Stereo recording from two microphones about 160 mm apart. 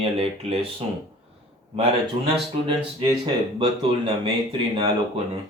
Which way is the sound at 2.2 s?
35° right (ahead or behind).